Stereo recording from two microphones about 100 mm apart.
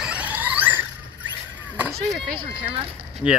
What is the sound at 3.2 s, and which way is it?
Speech, 10° right (ahead or behind).